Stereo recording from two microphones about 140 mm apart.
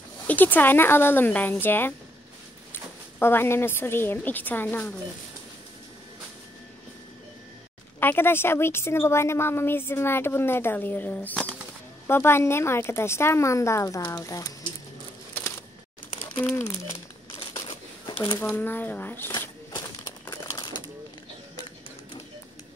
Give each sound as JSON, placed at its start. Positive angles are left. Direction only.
{"t": 0.3, "sound": "a woman's voice", "side_deg": 10}
{"t": 8.0, "sound": "a woman's voice", "side_deg": 15}
{"t": 16.3, "sound": "a woman's voice", "side_deg": 15}
{"t": 16.9, "sound": "crumpling", "side_deg": 40}
{"t": 18.1, "sound": "speech", "side_deg": 40}
{"t": 18.4, "sound": "a woman's voice", "side_deg": 15}
{"t": 20.2, "sound": "crumpling", "side_deg": 25}